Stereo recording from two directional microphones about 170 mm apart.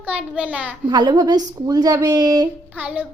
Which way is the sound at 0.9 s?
25° right (ahead or behind).